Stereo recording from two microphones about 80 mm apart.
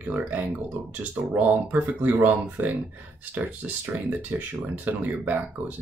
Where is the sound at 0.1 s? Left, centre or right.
Right.